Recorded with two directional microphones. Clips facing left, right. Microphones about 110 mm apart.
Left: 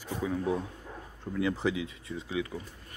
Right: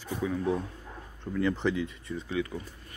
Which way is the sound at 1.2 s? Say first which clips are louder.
Right 2 dB; 5° left (ahead or behind).